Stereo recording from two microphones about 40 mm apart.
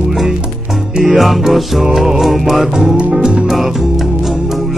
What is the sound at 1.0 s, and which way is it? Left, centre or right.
Music, centre.